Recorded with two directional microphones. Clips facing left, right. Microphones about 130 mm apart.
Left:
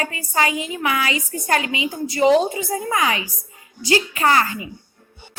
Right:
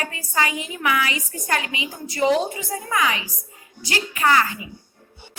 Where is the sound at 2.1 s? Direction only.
30° left (ahead or behind).